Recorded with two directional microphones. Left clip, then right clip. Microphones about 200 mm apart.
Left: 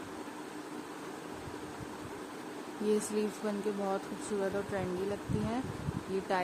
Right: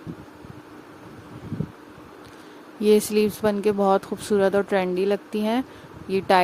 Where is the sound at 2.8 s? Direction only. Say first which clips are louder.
Right 14 dB; 45° right (ahead or behind).